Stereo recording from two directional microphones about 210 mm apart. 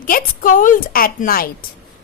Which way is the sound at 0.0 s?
40° left (ahead or behind).